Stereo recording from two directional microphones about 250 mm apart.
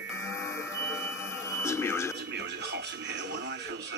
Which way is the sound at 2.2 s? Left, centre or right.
Right.